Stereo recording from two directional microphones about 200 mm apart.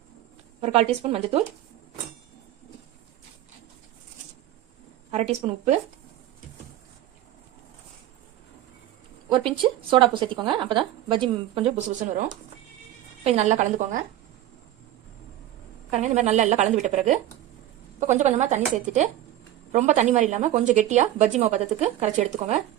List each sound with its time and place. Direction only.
0.6 s speech: 30° right (ahead or behind)
5.1 s a woman's voice: 30° right (ahead or behind)
9.3 s speech: 25° right (ahead or behind)
13.2 s a woman's voice: 35° right (ahead or behind)
15.9 s a woman's voice: 35° right (ahead or behind)